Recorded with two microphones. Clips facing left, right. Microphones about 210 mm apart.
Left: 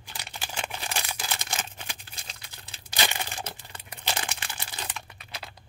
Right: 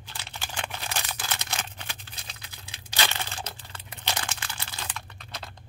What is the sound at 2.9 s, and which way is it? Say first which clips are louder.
Crumpling: even; 15° left (ahead or behind).